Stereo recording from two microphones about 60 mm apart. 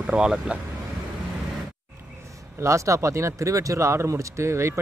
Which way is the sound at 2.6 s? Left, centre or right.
Right.